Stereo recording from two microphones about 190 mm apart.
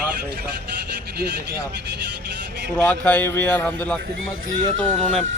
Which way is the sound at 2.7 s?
5° left (ahead or behind).